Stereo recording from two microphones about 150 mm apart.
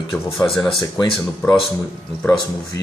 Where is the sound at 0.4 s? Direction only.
5° left (ahead or behind).